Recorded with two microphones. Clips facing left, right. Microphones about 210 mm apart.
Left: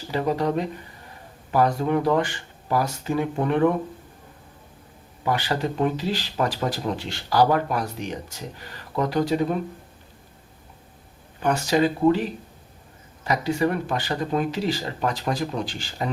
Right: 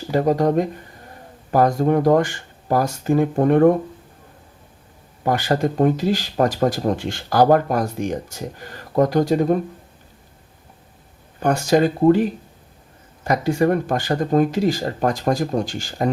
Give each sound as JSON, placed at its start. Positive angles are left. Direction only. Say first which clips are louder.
{"t": 0.1, "sound": "speech", "louder": "right 6 dB", "side_deg": -45}
{"t": 5.2, "sound": "speech", "louder": "right 5 dB", "side_deg": -45}
{"t": 11.3, "sound": "speech", "louder": "right 4 dB", "side_deg": -45}